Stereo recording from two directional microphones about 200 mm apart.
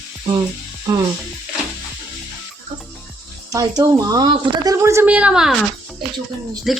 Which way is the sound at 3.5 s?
15° right (ahead or behind).